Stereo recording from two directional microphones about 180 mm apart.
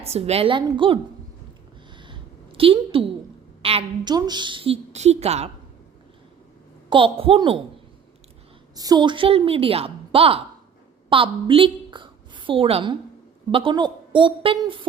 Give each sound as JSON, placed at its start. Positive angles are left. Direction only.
{"t": 0.0, "sound": "a woman's voice", "side_deg": -35}
{"t": 2.0, "sound": "a sound", "side_deg": -30}
{"t": 3.6, "sound": "a woman's voice", "side_deg": -30}
{"t": 6.9, "sound": "a woman's voice", "side_deg": -30}
{"t": 8.7, "sound": "a woman's voice", "side_deg": -20}